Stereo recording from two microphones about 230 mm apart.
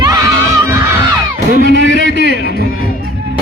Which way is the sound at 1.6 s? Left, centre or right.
Left.